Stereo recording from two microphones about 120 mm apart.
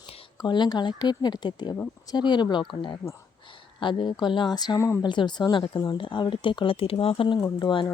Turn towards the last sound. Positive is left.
turn(degrees=40)  # may be behind; listen again after turning